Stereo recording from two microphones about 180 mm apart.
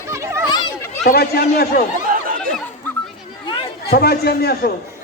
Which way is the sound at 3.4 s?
30° left (ahead or behind).